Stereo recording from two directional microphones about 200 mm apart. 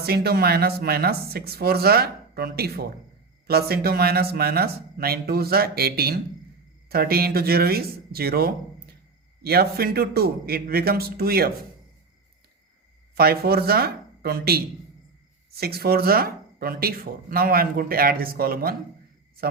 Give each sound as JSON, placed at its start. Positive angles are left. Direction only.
{"t": 0.0, "sound": "speech", "side_deg": -50}
{"t": 13.1, "sound": "speech", "side_deg": -50}